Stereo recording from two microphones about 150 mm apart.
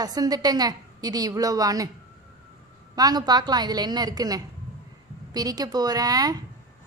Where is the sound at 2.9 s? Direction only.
25° right (ahead or behind).